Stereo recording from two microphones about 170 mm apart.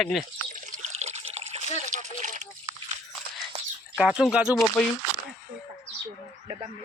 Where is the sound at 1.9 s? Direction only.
45° right (ahead or behind).